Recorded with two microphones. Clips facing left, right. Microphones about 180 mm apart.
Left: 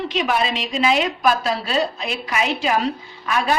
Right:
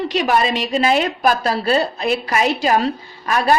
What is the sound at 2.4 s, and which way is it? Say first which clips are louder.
A woman's voice: right 2 dB; 40° right (ahead or behind).